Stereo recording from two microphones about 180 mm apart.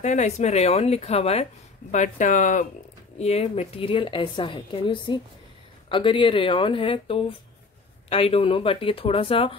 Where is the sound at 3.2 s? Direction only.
35° left (ahead or behind).